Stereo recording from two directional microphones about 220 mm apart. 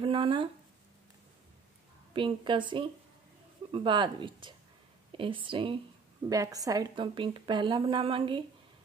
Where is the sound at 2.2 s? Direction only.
20° right (ahead or behind).